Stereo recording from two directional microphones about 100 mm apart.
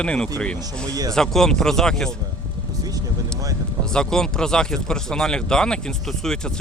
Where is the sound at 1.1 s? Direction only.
5° left (ahead or behind).